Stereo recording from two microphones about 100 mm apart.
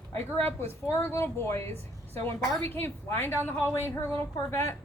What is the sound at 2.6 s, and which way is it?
Speech, 20° left (ahead or behind).